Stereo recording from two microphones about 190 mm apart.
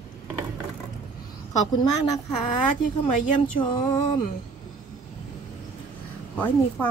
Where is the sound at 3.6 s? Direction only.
25° left (ahead or behind).